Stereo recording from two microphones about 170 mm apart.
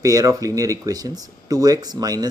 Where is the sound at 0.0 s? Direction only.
20° right (ahead or behind).